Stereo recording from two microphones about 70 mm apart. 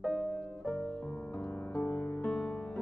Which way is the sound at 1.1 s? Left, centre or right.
Left.